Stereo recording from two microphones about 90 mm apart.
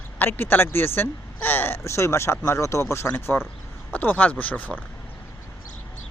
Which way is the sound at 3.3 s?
20° left (ahead or behind).